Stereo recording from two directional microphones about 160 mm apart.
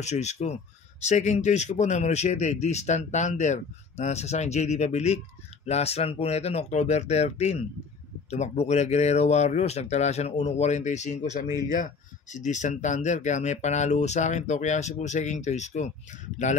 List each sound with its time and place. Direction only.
0.0 s speech: 45° left (ahead or behind)